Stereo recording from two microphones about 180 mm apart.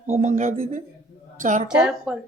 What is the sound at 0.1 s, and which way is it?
A woman's voice, 40° right (ahead or behind).